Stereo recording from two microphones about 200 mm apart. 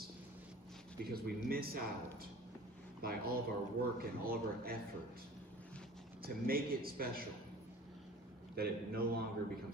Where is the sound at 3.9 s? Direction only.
50° right (ahead or behind).